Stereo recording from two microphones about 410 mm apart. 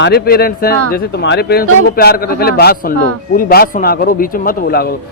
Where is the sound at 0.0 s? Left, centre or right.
Left.